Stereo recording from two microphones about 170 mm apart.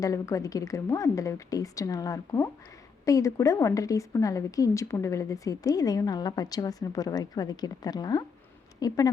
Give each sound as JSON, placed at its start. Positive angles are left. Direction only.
{"t": 0.0, "sound": "a woman's voice", "side_deg": 20}